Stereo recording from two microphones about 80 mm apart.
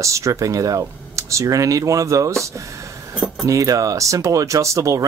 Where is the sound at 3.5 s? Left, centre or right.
Right.